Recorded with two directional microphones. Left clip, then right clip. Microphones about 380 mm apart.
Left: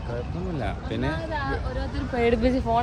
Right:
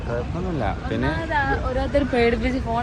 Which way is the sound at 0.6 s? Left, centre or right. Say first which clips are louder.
Right 5 dB; centre.